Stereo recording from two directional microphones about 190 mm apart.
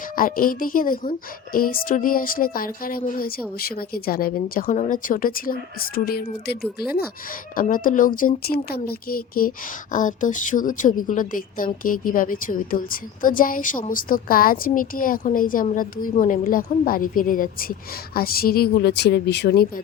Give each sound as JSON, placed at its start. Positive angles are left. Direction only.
{"t": 0.2, "sound": "a woman's voice", "side_deg": 50}